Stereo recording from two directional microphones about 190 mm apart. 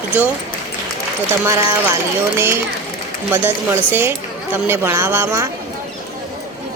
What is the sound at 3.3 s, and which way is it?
A woman's voice, 10° right (ahead or behind).